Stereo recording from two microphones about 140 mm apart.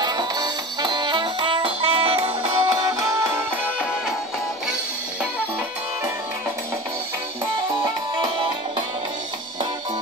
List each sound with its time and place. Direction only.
0.0 s music: 30° right (ahead or behind)
2.4 s music: 25° right (ahead or behind)
7.8 s music: 30° right (ahead or behind)